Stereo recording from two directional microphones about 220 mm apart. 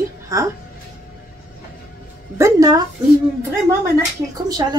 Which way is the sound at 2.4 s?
15° right (ahead or behind).